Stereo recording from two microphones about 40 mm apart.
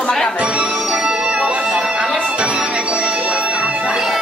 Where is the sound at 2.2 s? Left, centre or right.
Right.